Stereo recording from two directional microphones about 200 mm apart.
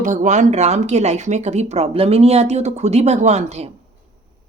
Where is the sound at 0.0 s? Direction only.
40° right (ahead or behind).